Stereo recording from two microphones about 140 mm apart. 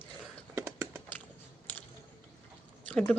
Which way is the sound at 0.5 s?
15° right (ahead or behind).